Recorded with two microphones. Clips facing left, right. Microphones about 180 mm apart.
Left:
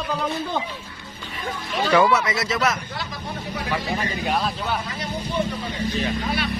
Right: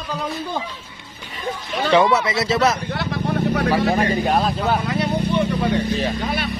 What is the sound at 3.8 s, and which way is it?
Speech, 55° right (ahead or behind).